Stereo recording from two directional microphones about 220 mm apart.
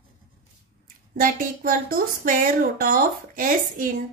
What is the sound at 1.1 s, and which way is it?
Speech, 40° right (ahead or behind).